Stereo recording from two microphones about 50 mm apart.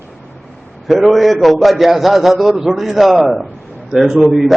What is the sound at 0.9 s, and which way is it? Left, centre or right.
A man's voice, centre.